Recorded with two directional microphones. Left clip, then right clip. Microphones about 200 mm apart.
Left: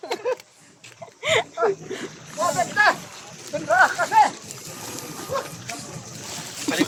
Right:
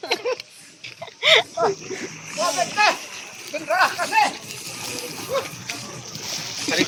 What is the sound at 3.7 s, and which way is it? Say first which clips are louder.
Speech: left 2 dB; 40° left (ahead or behind).